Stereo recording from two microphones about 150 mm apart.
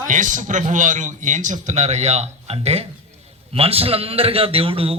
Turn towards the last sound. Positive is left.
turn(degrees=-40)  # may be behind; listen again after turning